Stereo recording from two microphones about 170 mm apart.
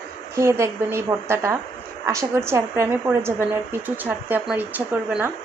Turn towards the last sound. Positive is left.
turn(degrees=-10)  # may be behind; listen again after turning